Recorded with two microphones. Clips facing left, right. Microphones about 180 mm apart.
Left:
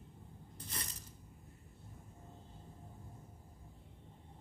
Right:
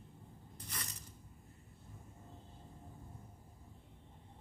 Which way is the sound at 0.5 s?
30° left (ahead or behind).